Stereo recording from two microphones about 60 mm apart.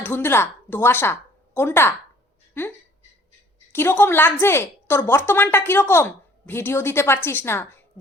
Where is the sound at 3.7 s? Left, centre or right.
Left.